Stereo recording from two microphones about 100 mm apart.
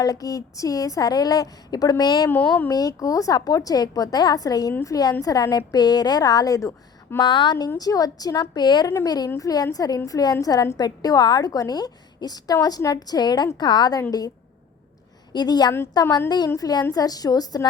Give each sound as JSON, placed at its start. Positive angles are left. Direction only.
{"t": 0.0, "sound": "a woman's voice", "side_deg": 35}
{"t": 2.3, "sound": "speech", "side_deg": 20}
{"t": 2.6, "sound": "a woman's voice", "side_deg": 35}
{"t": 7.2, "sound": "a woman's voice", "side_deg": 50}
{"t": 7.8, "sound": "a woman's voice", "side_deg": 35}
{"t": 15.3, "sound": "a woman's voice", "side_deg": 45}